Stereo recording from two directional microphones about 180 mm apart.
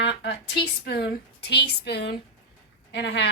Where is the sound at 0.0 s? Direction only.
70° left (ahead or behind).